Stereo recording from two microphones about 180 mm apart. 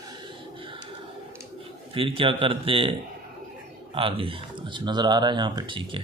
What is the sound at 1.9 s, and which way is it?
Speech, 30° right (ahead or behind).